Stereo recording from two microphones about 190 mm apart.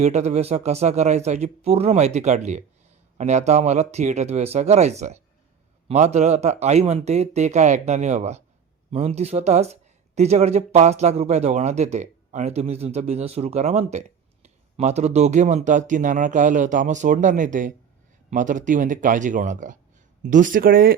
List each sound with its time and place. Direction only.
0.0 s speech: 35° right (ahead or behind)